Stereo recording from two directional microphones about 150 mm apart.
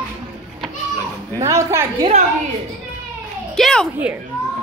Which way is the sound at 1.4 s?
20° right (ahead or behind).